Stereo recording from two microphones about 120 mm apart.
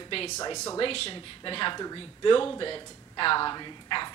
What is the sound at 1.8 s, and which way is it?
Speech, 40° left (ahead or behind).